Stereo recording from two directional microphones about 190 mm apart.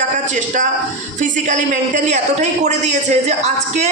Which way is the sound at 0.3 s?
45° right (ahead or behind).